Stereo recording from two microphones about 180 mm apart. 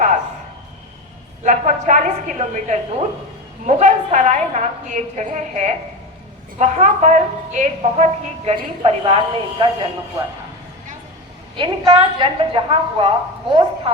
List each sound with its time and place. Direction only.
1.5 s a woman's voice: 45° right (ahead or behind); by 9.9 s 30° right (ahead or behind)
11.5 s a woman's voice: 25° right (ahead or behind)